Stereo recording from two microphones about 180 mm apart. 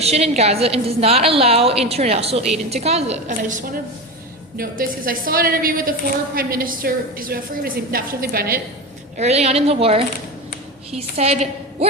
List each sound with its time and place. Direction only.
0.0 s a woman's voice: 35° right (ahead or behind)
4.5 s a woman's voice: 55° right (ahead or behind)
9.1 s a woman's voice: 35° right (ahead or behind)